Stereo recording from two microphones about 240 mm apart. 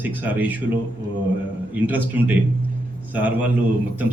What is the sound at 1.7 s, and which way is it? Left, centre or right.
Speech, centre.